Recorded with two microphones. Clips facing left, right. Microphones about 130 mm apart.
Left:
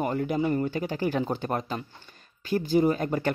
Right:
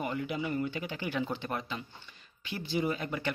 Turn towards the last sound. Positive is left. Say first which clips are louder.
# left 8 dB
turn(degrees=45)  # may be behind; listen again after turning